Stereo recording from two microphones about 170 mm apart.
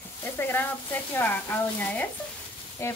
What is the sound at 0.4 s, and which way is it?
Speech, 10° left (ahead or behind).